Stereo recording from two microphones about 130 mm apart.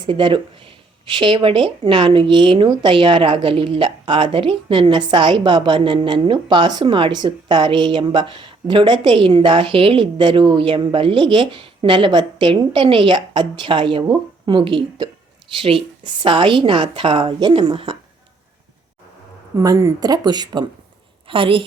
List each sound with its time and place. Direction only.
0.0 s speech: 40° right (ahead or behind)
19.5 s a woman's voice: 25° right (ahead or behind); by 21.7 s 40° right (ahead or behind)